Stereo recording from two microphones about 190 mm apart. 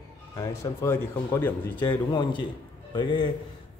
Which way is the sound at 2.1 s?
25° left (ahead or behind).